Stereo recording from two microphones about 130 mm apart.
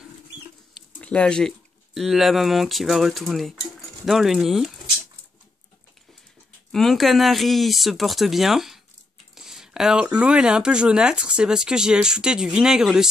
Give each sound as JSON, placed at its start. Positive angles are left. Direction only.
{"t": 1.0, "sound": "speech", "side_deg": 5}
{"t": 6.7, "sound": "speech", "side_deg": 0}